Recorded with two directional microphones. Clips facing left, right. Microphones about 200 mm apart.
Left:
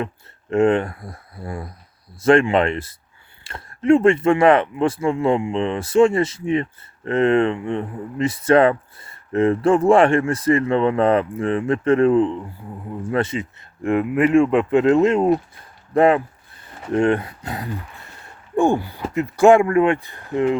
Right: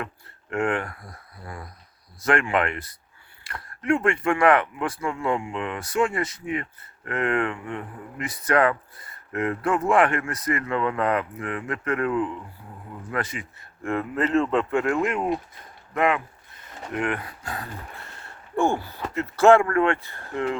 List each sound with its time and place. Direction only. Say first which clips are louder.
0.5 s speech: left 9 dB; 25° left (ahead or behind)